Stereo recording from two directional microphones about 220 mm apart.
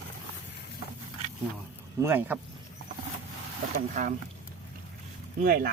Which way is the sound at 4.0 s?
35° right (ahead or behind).